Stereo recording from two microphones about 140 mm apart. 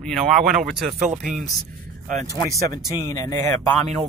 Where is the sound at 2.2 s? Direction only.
25° left (ahead or behind).